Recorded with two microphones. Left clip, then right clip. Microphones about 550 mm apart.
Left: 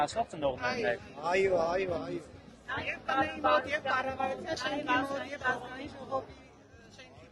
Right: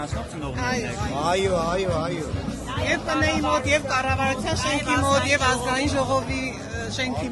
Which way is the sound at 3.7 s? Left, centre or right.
Right.